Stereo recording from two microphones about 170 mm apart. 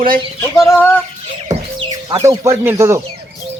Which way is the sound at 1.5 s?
20° right (ahead or behind).